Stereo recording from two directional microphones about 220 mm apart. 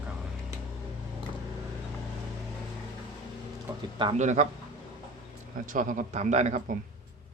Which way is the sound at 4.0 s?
30° right (ahead or behind).